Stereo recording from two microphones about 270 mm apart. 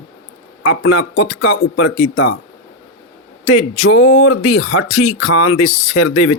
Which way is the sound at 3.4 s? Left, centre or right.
Left.